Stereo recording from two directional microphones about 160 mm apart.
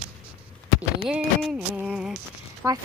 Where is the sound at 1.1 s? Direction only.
5° right (ahead or behind).